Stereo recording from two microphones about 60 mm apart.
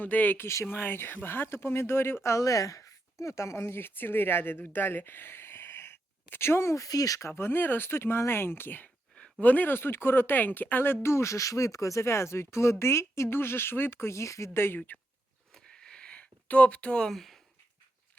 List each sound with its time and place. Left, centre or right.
0.0 s speech: left
0.4 s speech: left
0.7 s speech: left
6.7 s speech: left
7.2 s speech: left
11.0 s speech: left
15.5 s a sound: centre
17.1 s speech: centre